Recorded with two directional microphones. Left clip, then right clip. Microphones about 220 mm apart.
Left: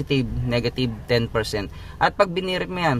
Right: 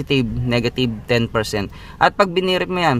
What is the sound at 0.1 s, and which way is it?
Speech, 30° right (ahead or behind).